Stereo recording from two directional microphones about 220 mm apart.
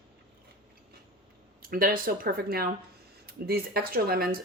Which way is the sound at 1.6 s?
40° right (ahead or behind).